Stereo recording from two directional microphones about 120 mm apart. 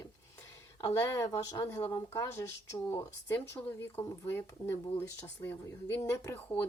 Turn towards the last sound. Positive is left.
turn(degrees=20)  # may be behind; listen again after turning